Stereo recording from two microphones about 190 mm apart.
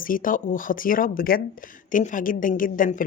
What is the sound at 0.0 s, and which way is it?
Speech, 45° left (ahead or behind).